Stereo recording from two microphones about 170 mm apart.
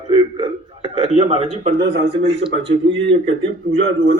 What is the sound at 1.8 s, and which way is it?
Speech, 60° right (ahead or behind).